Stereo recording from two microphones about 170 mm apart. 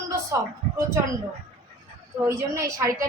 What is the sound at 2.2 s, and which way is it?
Speech, 15° right (ahead or behind).